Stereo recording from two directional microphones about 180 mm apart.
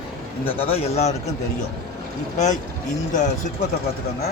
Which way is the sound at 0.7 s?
35° left (ahead or behind).